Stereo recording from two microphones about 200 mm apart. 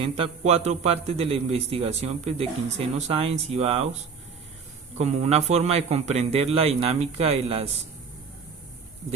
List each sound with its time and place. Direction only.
0.0 s a man's voice: 30° right (ahead or behind)
4.9 s a man's voice: 35° right (ahead or behind)